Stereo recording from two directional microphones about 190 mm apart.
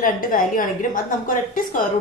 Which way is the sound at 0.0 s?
45° left (ahead or behind).